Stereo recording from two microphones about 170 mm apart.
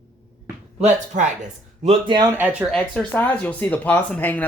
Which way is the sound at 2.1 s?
25° right (ahead or behind).